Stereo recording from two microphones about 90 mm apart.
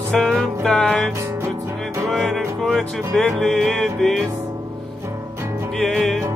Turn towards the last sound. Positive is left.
turn(degrees=5)  # may be behind; listen again after turning